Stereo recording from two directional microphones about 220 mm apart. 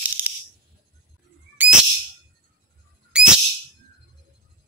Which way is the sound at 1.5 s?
5° right (ahead or behind).